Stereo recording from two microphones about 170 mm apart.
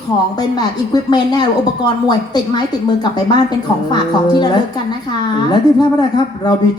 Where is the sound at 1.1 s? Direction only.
25° left (ahead or behind).